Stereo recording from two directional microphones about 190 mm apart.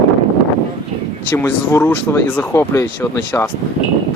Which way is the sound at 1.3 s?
10° left (ahead or behind).